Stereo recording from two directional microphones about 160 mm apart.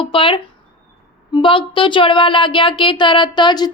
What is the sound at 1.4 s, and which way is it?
A woman's voice, 30° left (ahead or behind).